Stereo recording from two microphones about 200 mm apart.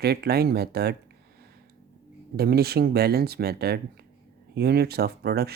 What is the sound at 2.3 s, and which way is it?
Speech, 50° right (ahead or behind).